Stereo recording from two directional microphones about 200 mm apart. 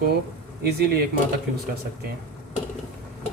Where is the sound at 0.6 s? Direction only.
50° right (ahead or behind).